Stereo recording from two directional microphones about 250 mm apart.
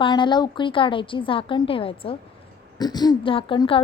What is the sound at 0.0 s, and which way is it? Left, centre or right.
A woman's voice, centre.